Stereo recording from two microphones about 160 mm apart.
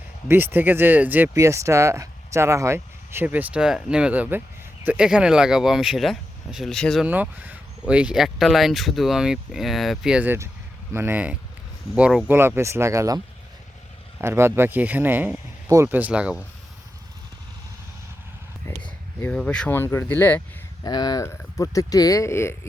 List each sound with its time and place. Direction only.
0.3 s speech: 15° right (ahead or behind); by 7.0 s 5° left (ahead or behind)
7.0 s speech: 10° right (ahead or behind)
14.2 s speech: 15° right (ahead or behind)
18.7 s speech: 15° left (ahead or behind)
20.8 s speech: 25° left (ahead or behind)